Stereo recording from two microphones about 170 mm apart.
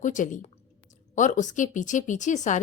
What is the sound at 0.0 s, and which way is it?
A woman's voice, 50° left (ahead or behind).